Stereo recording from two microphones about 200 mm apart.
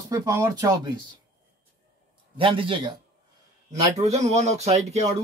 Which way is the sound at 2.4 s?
25° right (ahead or behind).